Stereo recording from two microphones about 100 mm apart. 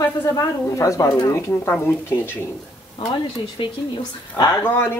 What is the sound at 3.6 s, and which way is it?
Speech, 50° left (ahead or behind).